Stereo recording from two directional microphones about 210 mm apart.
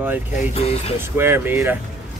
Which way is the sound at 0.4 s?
30° left (ahead or behind).